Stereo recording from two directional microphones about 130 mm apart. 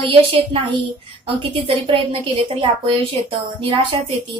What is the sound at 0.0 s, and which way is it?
Speech, 45° right (ahead or behind).